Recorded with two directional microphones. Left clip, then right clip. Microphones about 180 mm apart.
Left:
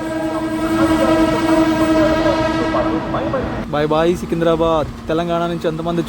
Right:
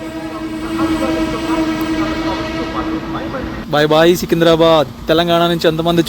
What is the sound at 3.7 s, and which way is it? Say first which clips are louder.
Speech: right 6 dB; 20° right (ahead or behind).